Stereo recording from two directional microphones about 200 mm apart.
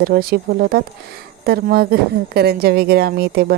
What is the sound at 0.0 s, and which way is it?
A woman's voice, 50° right (ahead or behind).